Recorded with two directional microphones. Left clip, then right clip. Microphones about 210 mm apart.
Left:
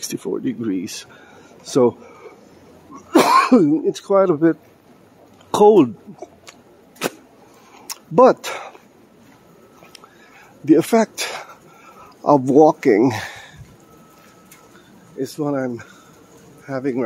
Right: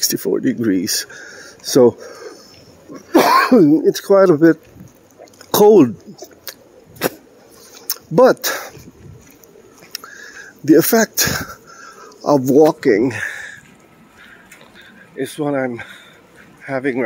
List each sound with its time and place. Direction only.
0.0 s speech: 15° right (ahead or behind)
3.1 s speech: 15° right (ahead or behind)
7.8 s a sound: 15° right (ahead or behind)
9.9 s a sound: 15° right (ahead or behind)
12.2 s speech: 5° right (ahead or behind)
15.3 s speech: centre (ahead or behind)
16.6 s speech: centre (ahead or behind)